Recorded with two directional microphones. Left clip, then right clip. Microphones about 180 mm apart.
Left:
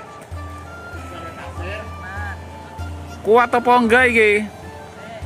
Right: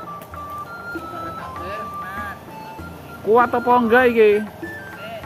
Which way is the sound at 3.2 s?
20° left (ahead or behind).